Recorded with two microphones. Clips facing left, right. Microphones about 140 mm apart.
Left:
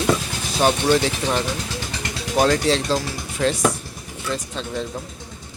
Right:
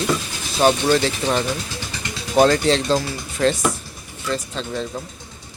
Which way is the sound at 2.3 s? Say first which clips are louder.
Right 3 dB; 5° left (ahead or behind).